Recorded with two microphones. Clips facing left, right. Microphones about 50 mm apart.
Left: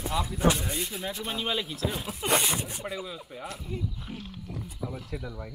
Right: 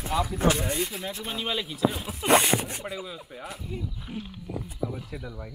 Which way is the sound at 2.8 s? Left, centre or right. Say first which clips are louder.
Even; centre.